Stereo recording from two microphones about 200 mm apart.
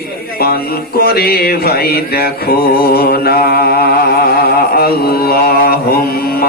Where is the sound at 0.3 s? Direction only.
50° left (ahead or behind).